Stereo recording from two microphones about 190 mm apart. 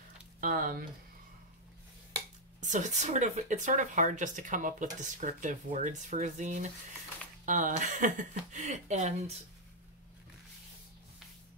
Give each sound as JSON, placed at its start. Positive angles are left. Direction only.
{"t": 0.4, "sound": "speech", "side_deg": -45}
{"t": 2.6, "sound": "speech", "side_deg": -40}